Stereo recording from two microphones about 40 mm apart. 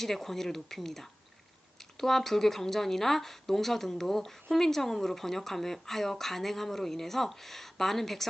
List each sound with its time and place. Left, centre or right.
0.0 s speech: centre